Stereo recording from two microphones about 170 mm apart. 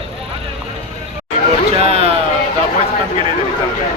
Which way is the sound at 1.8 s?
35° right (ahead or behind).